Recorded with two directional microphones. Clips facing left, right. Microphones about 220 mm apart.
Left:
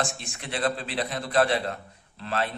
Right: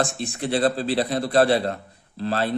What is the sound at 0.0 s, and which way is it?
A man's voice, 35° right (ahead or behind).